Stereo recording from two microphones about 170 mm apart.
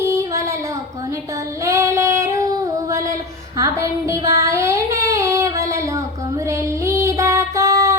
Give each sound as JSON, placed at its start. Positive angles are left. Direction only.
{"t": 0.0, "sound": "a sound", "side_deg": -20}
{"t": 1.6, "sound": "female singing", "side_deg": -15}
{"t": 3.6, "sound": "child singing", "side_deg": -15}
{"t": 6.5, "sound": "music", "side_deg": -20}